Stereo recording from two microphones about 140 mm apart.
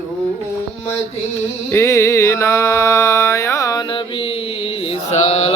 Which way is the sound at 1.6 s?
20° left (ahead or behind).